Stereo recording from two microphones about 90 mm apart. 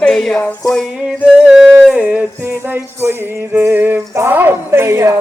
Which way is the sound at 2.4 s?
25° right (ahead or behind).